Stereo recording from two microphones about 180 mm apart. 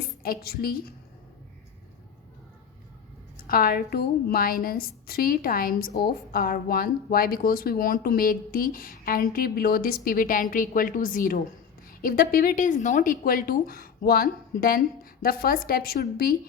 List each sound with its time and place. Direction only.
0.2 s a woman's voice: 55° left (ahead or behind)
3.3 s a woman's voice: 55° left (ahead or behind)